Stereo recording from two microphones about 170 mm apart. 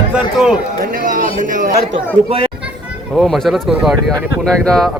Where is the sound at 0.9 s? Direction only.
55° right (ahead or behind).